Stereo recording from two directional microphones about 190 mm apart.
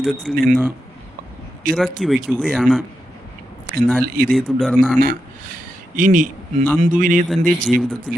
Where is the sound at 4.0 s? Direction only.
50° right (ahead or behind).